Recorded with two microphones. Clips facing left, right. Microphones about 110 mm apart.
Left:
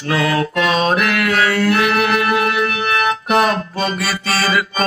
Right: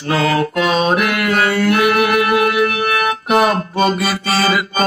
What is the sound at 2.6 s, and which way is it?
Organ, 50° right (ahead or behind).